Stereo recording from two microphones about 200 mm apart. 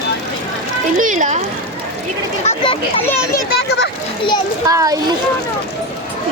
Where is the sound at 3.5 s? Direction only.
60° left (ahead or behind).